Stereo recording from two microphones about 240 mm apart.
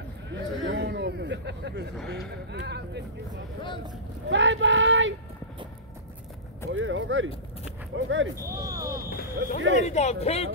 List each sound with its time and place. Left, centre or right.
0.3 s speech: right
4.3 s speech: right
6.7 s speech: right
8.4 s speech: centre
9.6 s speech: right
9.8 s speech: left